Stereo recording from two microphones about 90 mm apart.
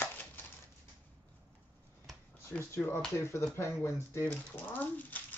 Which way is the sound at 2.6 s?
25° left (ahead or behind).